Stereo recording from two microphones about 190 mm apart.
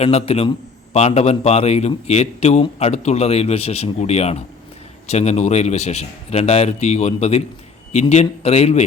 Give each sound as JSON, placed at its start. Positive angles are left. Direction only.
{"t": 0.0, "sound": "a man's voice", "side_deg": 30}